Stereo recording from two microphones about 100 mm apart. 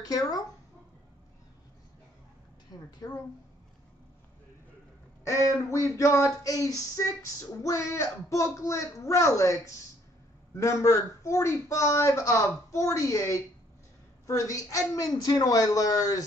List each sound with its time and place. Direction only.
0.0 s a man's voice: 40° left (ahead or behind)
2.7 s a man's voice: 40° left (ahead or behind)
5.7 s a man's voice: 30° left (ahead or behind)